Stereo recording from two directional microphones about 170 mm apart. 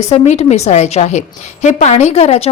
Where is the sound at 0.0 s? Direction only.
40° left (ahead or behind).